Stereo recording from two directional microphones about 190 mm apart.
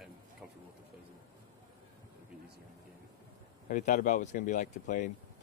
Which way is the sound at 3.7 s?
45° left (ahead or behind).